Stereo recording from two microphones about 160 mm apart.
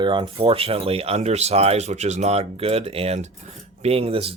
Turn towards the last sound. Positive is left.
turn(degrees=-35)  # may be behind; listen again after turning